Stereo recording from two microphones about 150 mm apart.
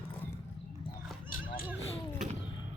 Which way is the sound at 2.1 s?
55° right (ahead or behind).